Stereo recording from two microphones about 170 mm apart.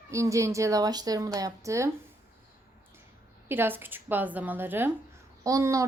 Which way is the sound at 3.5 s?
10° right (ahead or behind).